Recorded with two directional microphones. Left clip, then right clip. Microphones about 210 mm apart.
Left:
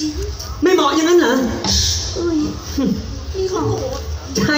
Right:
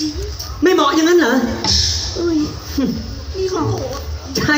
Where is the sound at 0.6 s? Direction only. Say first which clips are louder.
Right 1 dB; 20° right (ahead or behind).